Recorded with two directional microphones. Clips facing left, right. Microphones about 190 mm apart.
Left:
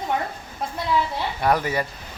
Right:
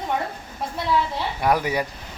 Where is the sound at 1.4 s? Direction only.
10° right (ahead or behind).